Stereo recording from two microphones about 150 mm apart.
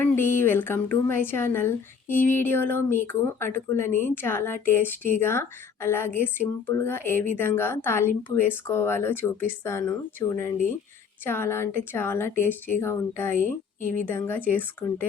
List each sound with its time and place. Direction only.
0.0 s a woman's voice: 15° left (ahead or behind)